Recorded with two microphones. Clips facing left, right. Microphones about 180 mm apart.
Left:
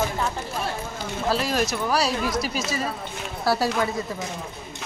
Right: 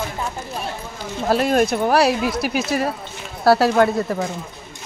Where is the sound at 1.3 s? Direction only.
55° right (ahead or behind).